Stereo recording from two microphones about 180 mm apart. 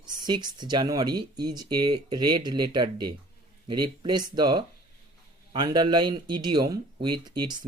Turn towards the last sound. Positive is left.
turn(degrees=-25)  # may be behind; listen again after turning